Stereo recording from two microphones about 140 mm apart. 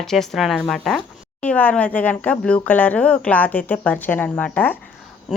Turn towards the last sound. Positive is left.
turn(degrees=10)  # may be behind; listen again after turning